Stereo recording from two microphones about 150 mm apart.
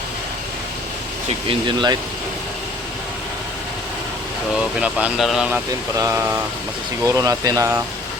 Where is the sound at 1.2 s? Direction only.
35° right (ahead or behind).